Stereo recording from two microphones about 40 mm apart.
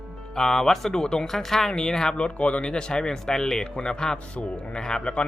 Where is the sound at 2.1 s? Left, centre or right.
Left.